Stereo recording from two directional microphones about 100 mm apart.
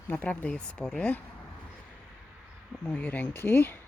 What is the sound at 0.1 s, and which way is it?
Speech, 15° left (ahead or behind).